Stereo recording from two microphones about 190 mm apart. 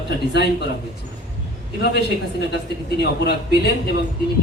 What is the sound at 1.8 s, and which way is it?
A man's voice, 60° left (ahead or behind).